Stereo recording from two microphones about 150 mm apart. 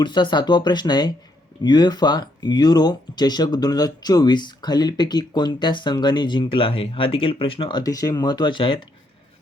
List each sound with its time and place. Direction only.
0.0 s speech: 30° left (ahead or behind)